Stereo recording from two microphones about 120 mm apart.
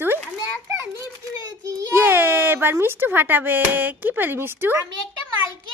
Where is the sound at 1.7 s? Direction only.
20° right (ahead or behind).